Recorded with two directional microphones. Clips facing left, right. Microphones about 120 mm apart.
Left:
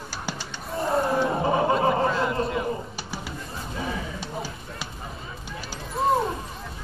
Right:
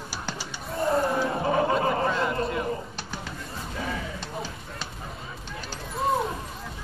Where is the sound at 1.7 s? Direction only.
Centre (ahead or behind).